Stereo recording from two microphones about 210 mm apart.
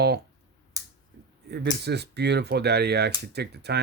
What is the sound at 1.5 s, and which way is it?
Speech, 50° right (ahead or behind).